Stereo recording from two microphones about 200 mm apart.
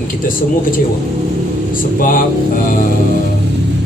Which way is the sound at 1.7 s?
45° left (ahead or behind).